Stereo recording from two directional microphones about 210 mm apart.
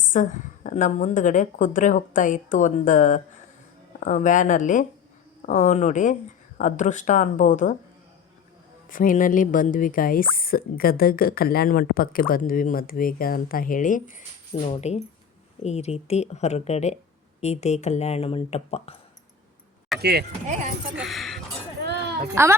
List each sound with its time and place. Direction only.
0.0 s a woman's voice: 40° left (ahead or behind)
8.9 s a woman's voice: 40° left (ahead or behind)
14.5 s a woman's voice: 30° left (ahead or behind)
20.0 s speech: 50° right (ahead or behind)
20.9 s speech: centre (ahead or behind)
21.8 s a sound: 50° right (ahead or behind)